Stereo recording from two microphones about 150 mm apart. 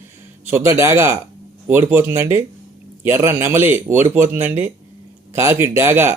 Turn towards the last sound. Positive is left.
turn(degrees=-15)  # may be behind; listen again after turning